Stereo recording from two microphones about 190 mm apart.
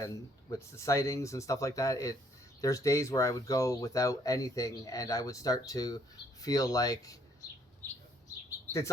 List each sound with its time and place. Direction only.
0.5 s speech: 15° left (ahead or behind)